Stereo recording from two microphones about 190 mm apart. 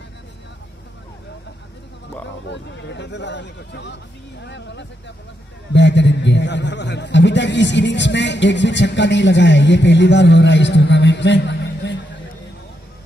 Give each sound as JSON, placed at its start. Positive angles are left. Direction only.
{"t": 2.4, "sound": "a man's voice", "side_deg": 70}